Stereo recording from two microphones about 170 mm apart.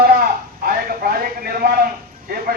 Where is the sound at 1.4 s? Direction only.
60° right (ahead or behind).